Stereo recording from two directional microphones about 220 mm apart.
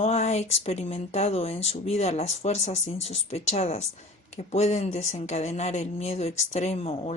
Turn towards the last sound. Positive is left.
turn(degrees=30)  # may be behind; listen again after turning